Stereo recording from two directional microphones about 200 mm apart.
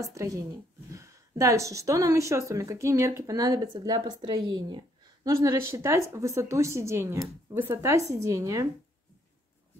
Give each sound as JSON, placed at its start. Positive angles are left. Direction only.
{"t": 0.0, "sound": "a woman's voice", "side_deg": -15}